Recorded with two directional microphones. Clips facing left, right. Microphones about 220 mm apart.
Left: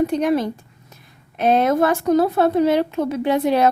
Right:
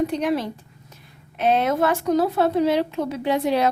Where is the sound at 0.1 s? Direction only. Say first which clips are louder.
Left 4 dB; 45° left (ahead or behind).